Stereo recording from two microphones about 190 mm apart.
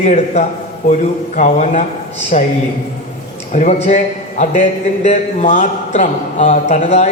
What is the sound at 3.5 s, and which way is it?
A man's voice, 40° left (ahead or behind).